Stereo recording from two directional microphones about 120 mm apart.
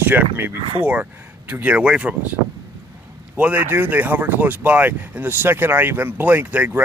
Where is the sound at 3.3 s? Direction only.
15° right (ahead or behind).